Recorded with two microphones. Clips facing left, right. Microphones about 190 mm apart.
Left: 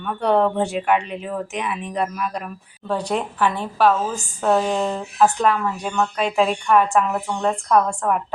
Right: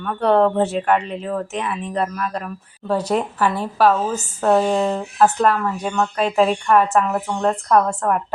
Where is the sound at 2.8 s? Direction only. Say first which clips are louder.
Right 3 dB; 5° right (ahead or behind).